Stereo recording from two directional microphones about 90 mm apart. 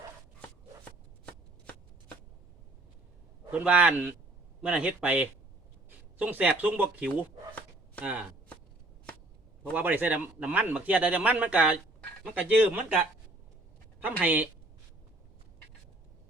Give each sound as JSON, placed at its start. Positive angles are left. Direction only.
{"t": 3.5, "sound": "speech", "side_deg": -15}
{"t": 9.7, "sound": "speech", "side_deg": -20}
{"t": 14.2, "sound": "speech", "side_deg": -15}